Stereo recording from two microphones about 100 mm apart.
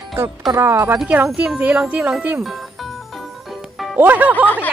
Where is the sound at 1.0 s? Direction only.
15° right (ahead or behind).